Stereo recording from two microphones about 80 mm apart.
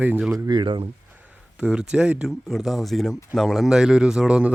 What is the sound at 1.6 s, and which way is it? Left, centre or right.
Speech, centre.